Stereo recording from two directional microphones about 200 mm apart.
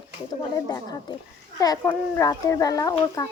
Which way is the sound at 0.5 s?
20° left (ahead or behind).